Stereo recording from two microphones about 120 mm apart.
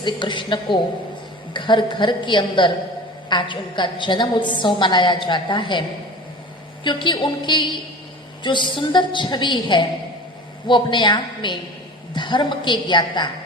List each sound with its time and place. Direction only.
0.0 s a woman's voice: 40° left (ahead or behind)
6.8 s a woman's voice: 40° left (ahead or behind)